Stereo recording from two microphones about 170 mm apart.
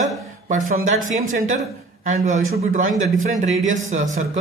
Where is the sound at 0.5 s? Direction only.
50° right (ahead or behind).